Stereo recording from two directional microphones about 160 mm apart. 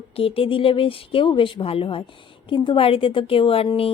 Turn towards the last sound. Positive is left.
turn(degrees=35)  # may be behind; listen again after turning